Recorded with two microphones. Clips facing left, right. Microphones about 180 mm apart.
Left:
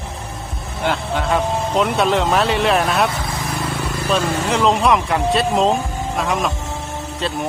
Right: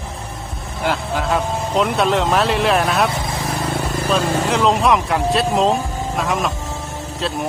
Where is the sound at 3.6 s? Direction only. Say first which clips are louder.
Right 3 dB; 40° right (ahead or behind).